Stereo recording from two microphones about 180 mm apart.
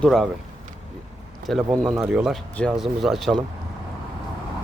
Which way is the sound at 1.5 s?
Centre (ahead or behind).